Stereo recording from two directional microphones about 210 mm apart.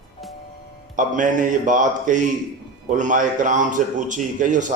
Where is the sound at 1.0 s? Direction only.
40° right (ahead or behind).